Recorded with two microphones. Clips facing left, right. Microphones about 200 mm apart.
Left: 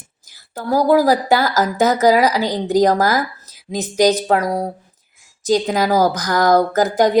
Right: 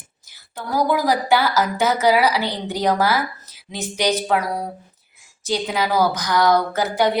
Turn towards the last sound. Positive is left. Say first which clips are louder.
# left 4 dB
turn(degrees=40)  # may be behind; listen again after turning